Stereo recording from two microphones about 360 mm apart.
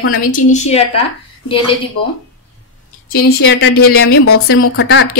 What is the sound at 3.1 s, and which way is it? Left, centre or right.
A woman's voice, left.